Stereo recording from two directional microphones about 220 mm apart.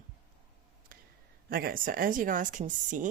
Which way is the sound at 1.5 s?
40° right (ahead or behind).